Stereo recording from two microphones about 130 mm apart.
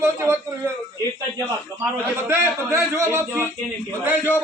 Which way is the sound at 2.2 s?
15° right (ahead or behind).